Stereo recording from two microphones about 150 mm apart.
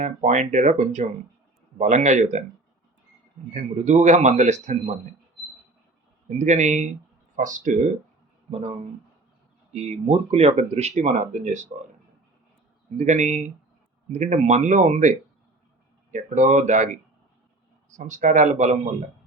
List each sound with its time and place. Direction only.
0.0 s speech: 50° right (ahead or behind)
3.5 s speech: 55° right (ahead or behind)
6.2 s speech: 50° right (ahead or behind)
9.7 s speech: 45° right (ahead or behind)
13.0 s speech: 50° right (ahead or behind)
16.1 s speech: 55° right (ahead or behind)